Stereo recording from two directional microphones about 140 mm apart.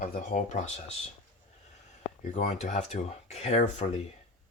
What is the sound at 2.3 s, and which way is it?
Speech, 55° left (ahead or behind).